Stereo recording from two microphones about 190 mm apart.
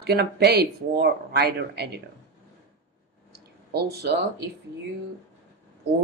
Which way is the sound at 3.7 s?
60° right (ahead or behind).